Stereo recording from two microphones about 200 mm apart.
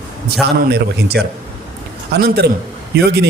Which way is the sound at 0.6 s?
55° right (ahead or behind).